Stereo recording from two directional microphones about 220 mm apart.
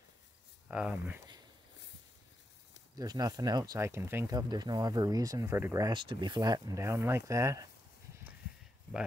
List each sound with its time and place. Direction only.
0.7 s speech: 5° right (ahead or behind)
3.0 s speech: 15° right (ahead or behind)